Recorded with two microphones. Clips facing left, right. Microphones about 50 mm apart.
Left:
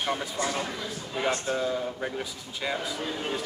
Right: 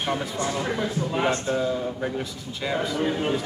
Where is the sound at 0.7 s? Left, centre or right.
Right.